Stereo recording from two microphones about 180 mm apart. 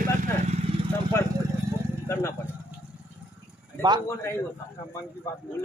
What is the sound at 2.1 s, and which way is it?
Vehicle, 15° left (ahead or behind).